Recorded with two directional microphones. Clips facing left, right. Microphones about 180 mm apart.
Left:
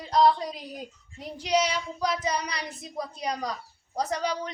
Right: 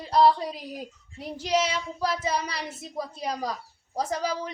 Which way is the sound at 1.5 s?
5° right (ahead or behind).